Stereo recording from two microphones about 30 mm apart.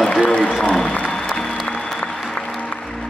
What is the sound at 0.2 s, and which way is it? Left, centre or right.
Applause, left.